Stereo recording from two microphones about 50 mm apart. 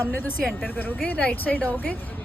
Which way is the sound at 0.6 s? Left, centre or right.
Left.